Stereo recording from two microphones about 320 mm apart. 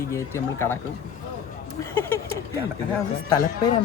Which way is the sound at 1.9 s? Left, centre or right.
Centre.